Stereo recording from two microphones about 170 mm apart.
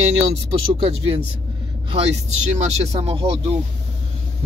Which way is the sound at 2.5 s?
40° right (ahead or behind).